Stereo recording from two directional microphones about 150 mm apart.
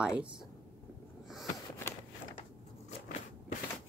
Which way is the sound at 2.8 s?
60° left (ahead or behind).